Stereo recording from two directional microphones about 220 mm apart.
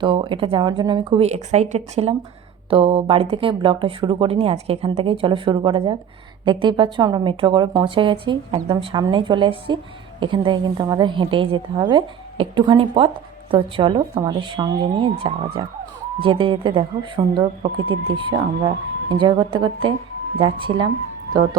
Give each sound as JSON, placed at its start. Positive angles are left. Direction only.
{"t": 0.0, "sound": "a woman's voice", "side_deg": -20}